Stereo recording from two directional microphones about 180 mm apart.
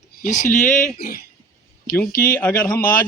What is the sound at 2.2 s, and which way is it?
Speech, 10° left (ahead or behind).